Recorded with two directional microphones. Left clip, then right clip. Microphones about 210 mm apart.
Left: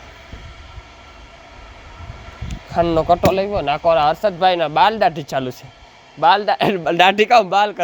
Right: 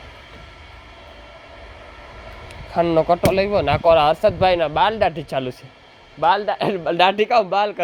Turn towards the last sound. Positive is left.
turn(degrees=10)  # may be behind; listen again after turning